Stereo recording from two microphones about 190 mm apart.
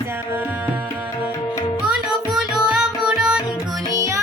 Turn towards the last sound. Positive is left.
turn(degrees=-15)  # may be behind; listen again after turning